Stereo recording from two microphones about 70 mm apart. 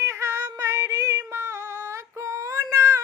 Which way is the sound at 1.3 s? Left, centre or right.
Right.